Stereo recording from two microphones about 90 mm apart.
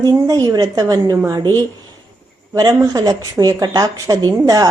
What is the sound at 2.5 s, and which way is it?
Speech, 40° right (ahead or behind).